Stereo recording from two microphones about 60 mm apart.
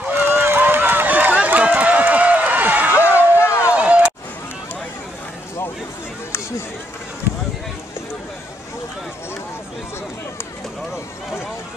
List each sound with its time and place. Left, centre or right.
0.1 s run: right
3.3 s run: left
3.7 s a sound: right